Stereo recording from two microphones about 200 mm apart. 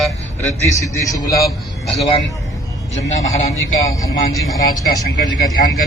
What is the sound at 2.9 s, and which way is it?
Speech, 35° left (ahead or behind).